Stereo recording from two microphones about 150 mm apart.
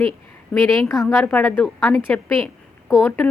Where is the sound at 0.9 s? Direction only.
20° left (ahead or behind).